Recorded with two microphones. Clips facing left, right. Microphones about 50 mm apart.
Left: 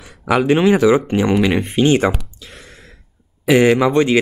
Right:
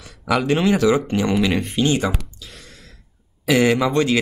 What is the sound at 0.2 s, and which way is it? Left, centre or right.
Speech, centre.